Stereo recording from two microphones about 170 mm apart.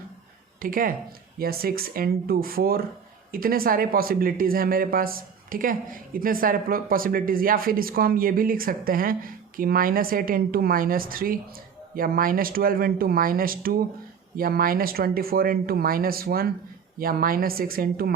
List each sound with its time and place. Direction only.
0.6 s speech: 55° right (ahead or behind)